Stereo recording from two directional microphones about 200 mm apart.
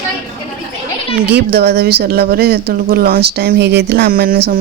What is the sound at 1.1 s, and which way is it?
A woman's voice, 55° right (ahead or behind).